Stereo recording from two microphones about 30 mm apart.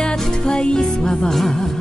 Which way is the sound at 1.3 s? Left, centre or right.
Centre.